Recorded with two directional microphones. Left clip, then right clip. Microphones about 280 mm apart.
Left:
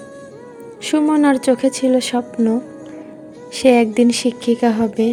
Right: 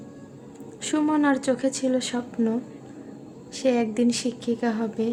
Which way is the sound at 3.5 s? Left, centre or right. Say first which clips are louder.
Left 10 dB; left.